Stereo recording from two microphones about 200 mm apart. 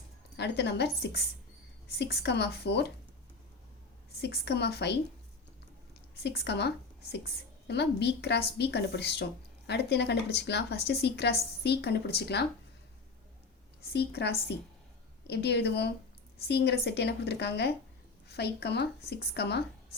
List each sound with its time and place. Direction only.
0.3 s a woman's voice: 55° left (ahead or behind)
4.2 s a woman's voice: 55° left (ahead or behind)
13.9 s a woman's voice: 55° left (ahead or behind)